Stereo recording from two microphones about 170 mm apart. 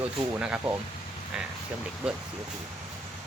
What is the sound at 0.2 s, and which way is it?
Speech, 5° right (ahead or behind).